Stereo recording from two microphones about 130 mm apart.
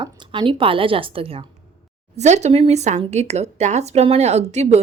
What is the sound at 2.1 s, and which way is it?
Speech, 60° right (ahead or behind).